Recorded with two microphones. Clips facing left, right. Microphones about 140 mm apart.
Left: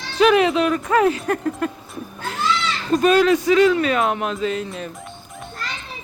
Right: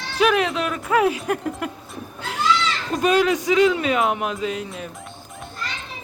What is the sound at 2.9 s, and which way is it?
Speech, 15° right (ahead or behind).